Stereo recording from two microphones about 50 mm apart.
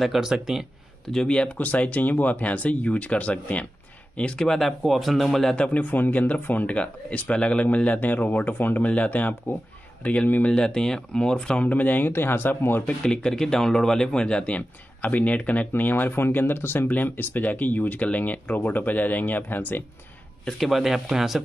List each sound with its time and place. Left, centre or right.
0.0 s speech: centre
1.1 s speech: centre
1.6 s speech: left
4.5 s speech: centre
5.6 s speech: left
6.7 s speech: left
8.8 s speech: left
10.5 s speech: centre
11.6 s speech: left
12.1 s speech: left
13.0 s speech: centre; by 15.7 s left
15.7 s speech: left
20.4 s speech: centre